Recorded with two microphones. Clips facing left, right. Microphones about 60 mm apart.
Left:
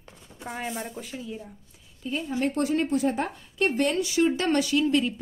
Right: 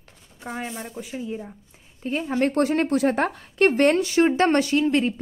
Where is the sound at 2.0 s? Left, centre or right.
Right.